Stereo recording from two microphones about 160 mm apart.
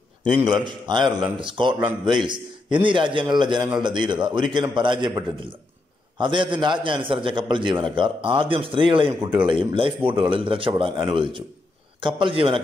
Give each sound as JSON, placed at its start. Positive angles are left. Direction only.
{"t": 0.5, "sound": "a man's voice", "side_deg": -30}